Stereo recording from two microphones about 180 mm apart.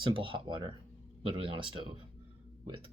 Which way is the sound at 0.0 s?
30° right (ahead or behind).